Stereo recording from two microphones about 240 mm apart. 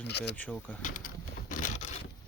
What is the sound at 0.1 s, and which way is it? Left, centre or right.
Speech, left.